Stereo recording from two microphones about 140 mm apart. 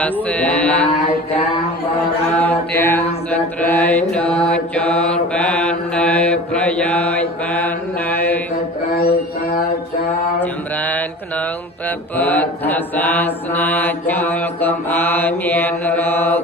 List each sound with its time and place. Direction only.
0.0 s mantra: 10° left (ahead or behind)
2.3 s mantra: 10° left (ahead or behind)
10.4 s mantra: 10° left (ahead or behind)
12.1 s mantra: 10° left (ahead or behind)